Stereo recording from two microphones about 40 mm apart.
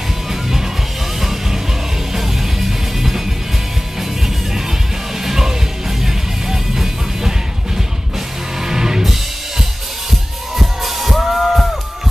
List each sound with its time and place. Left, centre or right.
0.3 s music: centre
2.1 s music: centre
5.2 s music: centre
10.5 s music: centre